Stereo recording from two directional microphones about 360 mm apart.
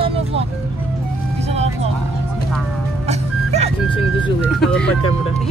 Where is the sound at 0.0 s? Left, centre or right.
Centre.